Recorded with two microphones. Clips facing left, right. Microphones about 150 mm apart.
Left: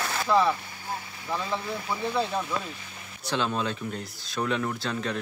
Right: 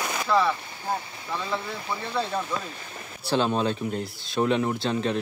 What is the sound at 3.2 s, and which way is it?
Speech, 35° right (ahead or behind).